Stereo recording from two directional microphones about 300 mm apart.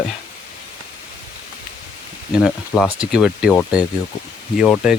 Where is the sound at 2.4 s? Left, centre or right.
Centre.